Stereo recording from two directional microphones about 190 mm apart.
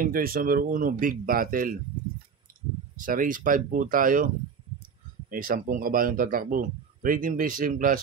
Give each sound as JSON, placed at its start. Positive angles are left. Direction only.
{"t": 0.0, "sound": "speech", "side_deg": -50}
{"t": 3.0, "sound": "speech", "side_deg": -45}
{"t": 5.3, "sound": "speech", "side_deg": -45}